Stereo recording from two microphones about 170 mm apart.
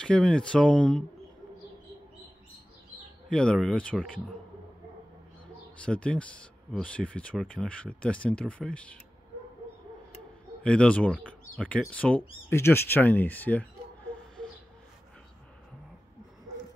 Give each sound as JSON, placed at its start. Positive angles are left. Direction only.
{"t": 0.0, "sound": "speech", "side_deg": 5}
{"t": 3.3, "sound": "speech", "side_deg": 5}
{"t": 5.8, "sound": "speech", "side_deg": 5}
{"t": 10.6, "sound": "speech", "side_deg": 5}